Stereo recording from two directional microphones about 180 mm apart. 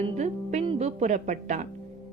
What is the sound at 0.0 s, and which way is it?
Music, 40° right (ahead or behind).